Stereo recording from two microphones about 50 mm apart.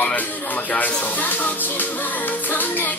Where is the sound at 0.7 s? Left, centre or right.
Left.